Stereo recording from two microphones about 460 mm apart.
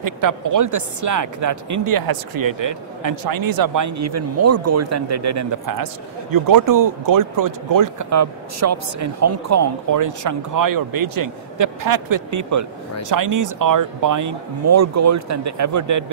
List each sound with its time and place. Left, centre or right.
0.0 s speech: right